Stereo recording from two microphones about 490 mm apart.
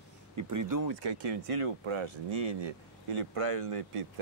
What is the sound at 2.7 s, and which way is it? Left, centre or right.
Speech, right.